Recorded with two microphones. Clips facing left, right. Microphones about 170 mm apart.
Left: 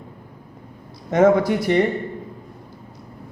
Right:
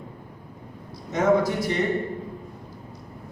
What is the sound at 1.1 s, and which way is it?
Speech, 65° left (ahead or behind).